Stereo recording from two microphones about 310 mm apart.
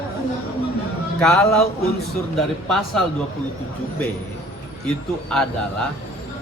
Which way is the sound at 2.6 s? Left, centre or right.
Centre.